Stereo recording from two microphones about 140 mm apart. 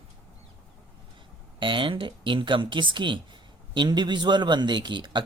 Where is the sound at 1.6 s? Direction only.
35° right (ahead or behind).